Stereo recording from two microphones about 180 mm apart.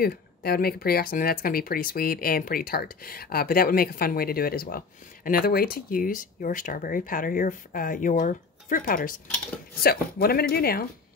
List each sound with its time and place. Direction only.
0.0 s speech: 60° left (ahead or behind)